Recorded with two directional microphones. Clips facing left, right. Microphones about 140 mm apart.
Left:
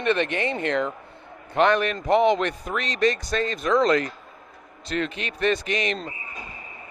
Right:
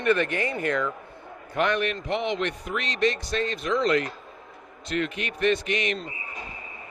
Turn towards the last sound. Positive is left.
turn(degrees=35)  # may be behind; listen again after turning